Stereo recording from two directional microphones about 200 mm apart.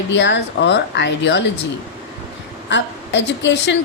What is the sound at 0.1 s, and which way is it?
A woman's voice, 60° left (ahead or behind).